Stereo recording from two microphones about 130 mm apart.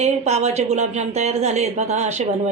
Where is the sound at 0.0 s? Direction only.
55° right (ahead or behind).